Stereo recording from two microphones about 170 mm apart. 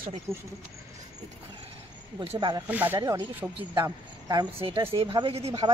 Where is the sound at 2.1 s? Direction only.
25° right (ahead or behind).